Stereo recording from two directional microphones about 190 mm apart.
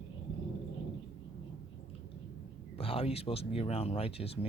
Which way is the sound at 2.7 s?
30° left (ahead or behind).